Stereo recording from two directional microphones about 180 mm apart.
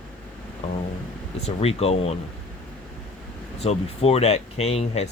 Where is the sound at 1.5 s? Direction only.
35° left (ahead or behind).